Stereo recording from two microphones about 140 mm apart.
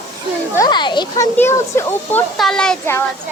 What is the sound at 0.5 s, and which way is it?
Speech, 30° left (ahead or behind).